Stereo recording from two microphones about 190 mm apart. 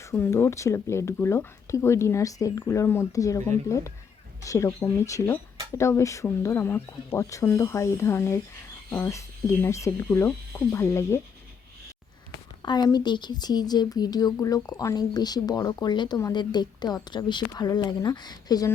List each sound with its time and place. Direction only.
0.0 s speech: 15° left (ahead or behind)
12.6 s a woman's voice: 20° left (ahead or behind)